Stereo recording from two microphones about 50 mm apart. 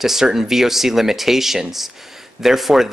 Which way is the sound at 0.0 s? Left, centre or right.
Centre.